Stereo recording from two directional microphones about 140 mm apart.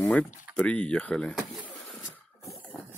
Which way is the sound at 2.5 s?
10° left (ahead or behind).